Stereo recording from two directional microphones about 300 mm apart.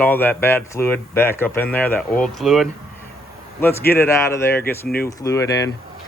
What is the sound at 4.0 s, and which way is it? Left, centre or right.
Speech, centre.